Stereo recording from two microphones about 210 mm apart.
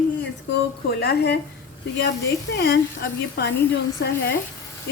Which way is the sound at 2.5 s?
55° left (ahead or behind).